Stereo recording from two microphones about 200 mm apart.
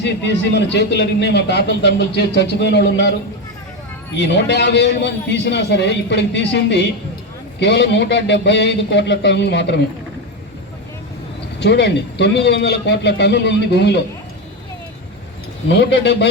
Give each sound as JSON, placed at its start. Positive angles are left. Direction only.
{"t": 0.0, "sound": "a man's voice", "side_deg": 60}
{"t": 4.2, "sound": "a man's voice", "side_deg": 60}
{"t": 11.6, "sound": "a man's voice", "side_deg": 60}
{"t": 15.6, "sound": "a man's voice", "side_deg": 60}